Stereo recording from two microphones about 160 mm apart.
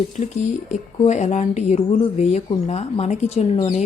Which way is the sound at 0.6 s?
45° left (ahead or behind).